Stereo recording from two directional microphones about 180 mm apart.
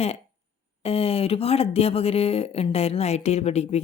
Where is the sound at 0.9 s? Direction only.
35° left (ahead or behind).